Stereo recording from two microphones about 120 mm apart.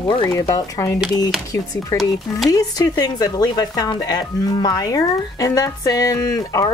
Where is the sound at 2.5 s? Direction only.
30° left (ahead or behind).